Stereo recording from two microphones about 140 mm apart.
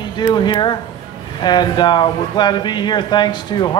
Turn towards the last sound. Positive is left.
turn(degrees=30)  # may be behind; listen again after turning